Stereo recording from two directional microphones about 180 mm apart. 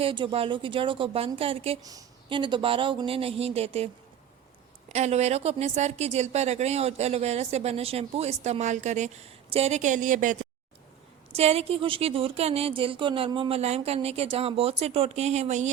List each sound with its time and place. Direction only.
0.0 s speech: 30° right (ahead or behind)
1.8 s speech: 20° right (ahead or behind)
4.9 s a woman's voice: 40° right (ahead or behind)
11.3 s a woman's voice: 35° right (ahead or behind)